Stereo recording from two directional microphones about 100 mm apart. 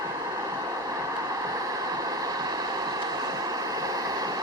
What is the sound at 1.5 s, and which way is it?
Vehicle, 40° right (ahead or behind).